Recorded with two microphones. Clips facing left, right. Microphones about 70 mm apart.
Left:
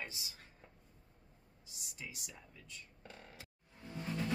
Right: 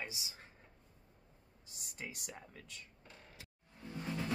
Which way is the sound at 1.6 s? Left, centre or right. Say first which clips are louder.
Right 2 dB; right.